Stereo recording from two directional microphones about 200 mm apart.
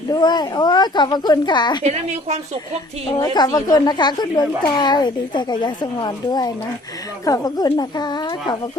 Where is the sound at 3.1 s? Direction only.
20° left (ahead or behind).